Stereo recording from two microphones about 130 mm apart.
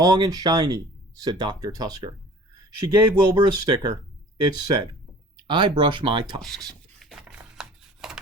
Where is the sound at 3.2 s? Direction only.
30° right (ahead or behind).